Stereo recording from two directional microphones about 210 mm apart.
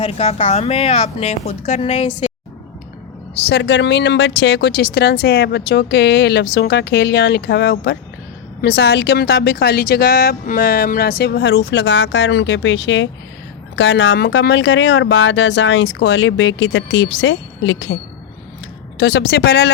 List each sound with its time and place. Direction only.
0.0 s a woman's voice: 30° left (ahead or behind)
3.5 s speech: 55° left (ahead or behind)
18.9 s speech: 55° left (ahead or behind)